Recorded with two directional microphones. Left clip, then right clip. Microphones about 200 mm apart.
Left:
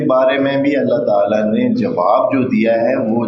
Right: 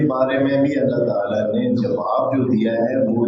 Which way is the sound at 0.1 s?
35° left (ahead or behind).